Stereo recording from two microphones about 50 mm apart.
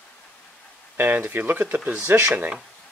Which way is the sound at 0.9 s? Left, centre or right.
Right.